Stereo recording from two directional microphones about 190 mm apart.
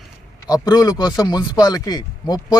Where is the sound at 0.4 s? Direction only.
20° left (ahead or behind).